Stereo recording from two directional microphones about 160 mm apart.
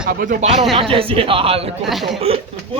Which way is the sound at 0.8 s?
35° right (ahead or behind).